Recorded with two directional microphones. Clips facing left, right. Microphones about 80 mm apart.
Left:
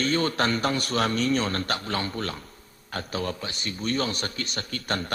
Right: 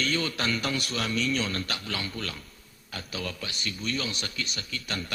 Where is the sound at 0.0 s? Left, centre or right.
Left.